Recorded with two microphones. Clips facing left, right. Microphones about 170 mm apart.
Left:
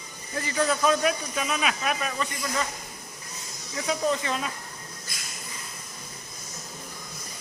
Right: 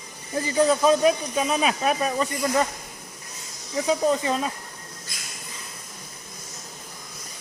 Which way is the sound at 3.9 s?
30° right (ahead or behind).